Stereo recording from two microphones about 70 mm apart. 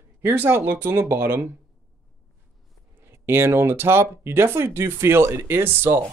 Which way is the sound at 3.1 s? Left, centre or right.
Right.